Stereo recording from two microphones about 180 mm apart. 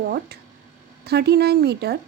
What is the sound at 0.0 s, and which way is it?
A woman's voice, 60° right (ahead or behind).